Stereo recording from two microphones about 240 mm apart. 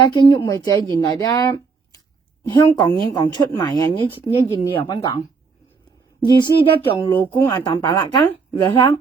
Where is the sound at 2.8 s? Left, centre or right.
Centre.